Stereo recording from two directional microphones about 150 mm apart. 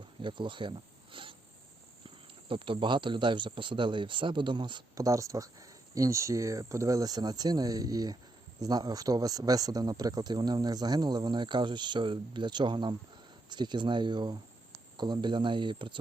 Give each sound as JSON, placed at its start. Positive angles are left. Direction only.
{"t": 0.2, "sound": "speech", "side_deg": -35}